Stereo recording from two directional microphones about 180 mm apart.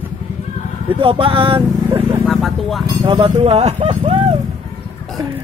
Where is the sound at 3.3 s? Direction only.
35° right (ahead or behind).